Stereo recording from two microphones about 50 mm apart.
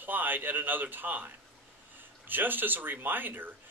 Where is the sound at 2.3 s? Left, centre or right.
Right.